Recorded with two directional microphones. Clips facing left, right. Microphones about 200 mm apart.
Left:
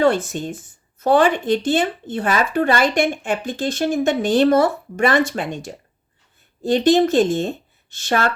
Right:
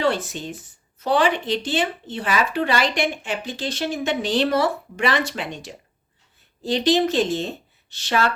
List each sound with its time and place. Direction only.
0.0 s speech: 50° left (ahead or behind)